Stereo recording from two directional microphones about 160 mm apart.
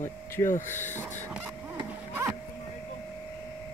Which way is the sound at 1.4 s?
20° right (ahead or behind).